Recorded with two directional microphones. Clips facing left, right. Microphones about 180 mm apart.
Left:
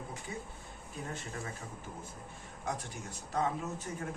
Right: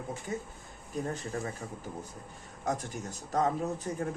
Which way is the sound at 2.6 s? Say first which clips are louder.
Right 6 dB; 45° right (ahead or behind).